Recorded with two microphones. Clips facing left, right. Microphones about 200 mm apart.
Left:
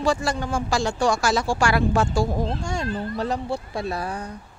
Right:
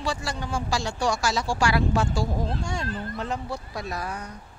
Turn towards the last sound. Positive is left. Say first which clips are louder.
# left 5 dB
turn(degrees=30)  # may be behind; listen again after turning